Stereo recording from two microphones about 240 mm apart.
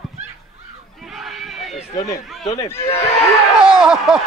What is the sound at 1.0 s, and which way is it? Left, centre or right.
Run, centre.